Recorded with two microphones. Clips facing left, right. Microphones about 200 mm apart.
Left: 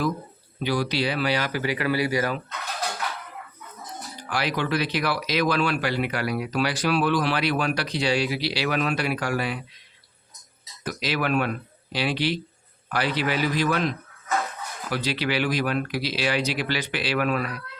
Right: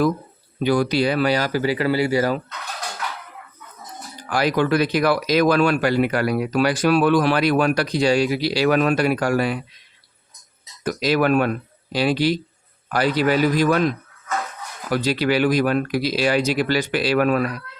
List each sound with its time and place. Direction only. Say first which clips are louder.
0.6 s speech: right 6 dB; 50° right (ahead or behind); by 2.4 s 30° right (ahead or behind)
4.3 s speech: right 7 dB; 45° right (ahead or behind)
10.8 s speech: right 8 dB; 45° right (ahead or behind)